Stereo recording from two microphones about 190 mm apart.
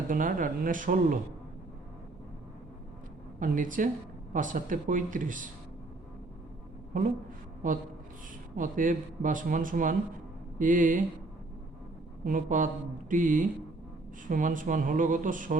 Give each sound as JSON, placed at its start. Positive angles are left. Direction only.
{"t": 0.1, "sound": "a man's voice", "side_deg": -45}
{"t": 3.4, "sound": "a man's voice", "side_deg": -45}
{"t": 8.5, "sound": "a man's voice", "side_deg": -45}
{"t": 12.2, "sound": "a man's voice", "side_deg": -45}